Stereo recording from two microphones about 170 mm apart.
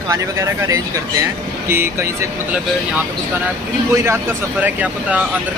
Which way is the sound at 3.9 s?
15° right (ahead or behind).